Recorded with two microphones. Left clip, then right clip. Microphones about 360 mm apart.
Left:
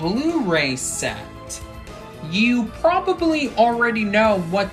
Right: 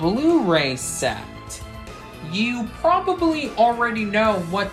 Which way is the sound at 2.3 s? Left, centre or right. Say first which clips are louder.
Left 5 dB; centre.